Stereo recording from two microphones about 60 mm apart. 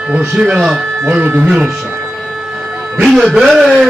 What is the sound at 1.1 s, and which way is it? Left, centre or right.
Speech, right.